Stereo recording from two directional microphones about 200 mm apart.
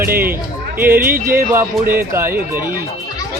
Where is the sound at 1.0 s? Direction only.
45° right (ahead or behind).